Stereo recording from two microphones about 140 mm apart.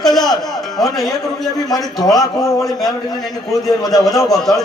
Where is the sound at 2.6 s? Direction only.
Centre (ahead or behind).